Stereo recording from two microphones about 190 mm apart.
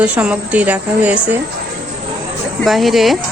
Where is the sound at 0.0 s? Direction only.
5° right (ahead or behind).